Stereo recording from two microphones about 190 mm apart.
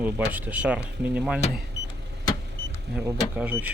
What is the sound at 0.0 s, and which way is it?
Speech, 10° right (ahead or behind).